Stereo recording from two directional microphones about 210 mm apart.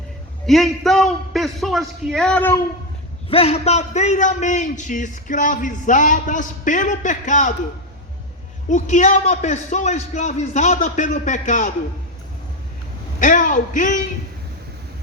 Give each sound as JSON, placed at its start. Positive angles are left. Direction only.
{"t": 0.4, "sound": "a man's voice", "side_deg": 0}
{"t": 3.2, "sound": "a man's voice", "side_deg": 30}
{"t": 8.7, "sound": "a man's voice", "side_deg": 35}
{"t": 13.1, "sound": "a man's voice", "side_deg": 40}